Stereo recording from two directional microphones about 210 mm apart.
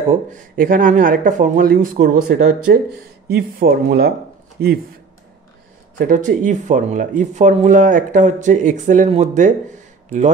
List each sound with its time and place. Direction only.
0.3 s speech: 40° right (ahead or behind)
5.9 s speech: 40° right (ahead or behind)